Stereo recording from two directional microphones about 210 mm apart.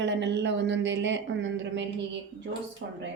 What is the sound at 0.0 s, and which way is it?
Speech, 55° right (ahead or behind).